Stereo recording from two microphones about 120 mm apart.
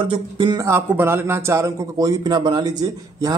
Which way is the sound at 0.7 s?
20° right (ahead or behind).